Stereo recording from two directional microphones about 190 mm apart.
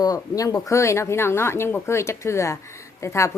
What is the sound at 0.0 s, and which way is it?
Speech, 20° left (ahead or behind).